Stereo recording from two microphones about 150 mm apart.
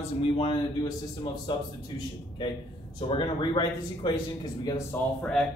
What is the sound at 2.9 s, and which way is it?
A man's voice, 30° left (ahead or behind).